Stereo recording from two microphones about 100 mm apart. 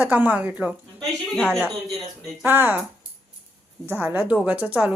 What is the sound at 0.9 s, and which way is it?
Speech, 5° left (ahead or behind).